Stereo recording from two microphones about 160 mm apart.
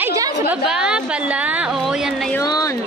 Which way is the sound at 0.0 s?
15° right (ahead or behind).